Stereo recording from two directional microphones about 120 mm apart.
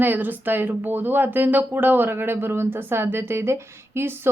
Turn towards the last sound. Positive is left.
turn(degrees=-20)  # may be behind; listen again after turning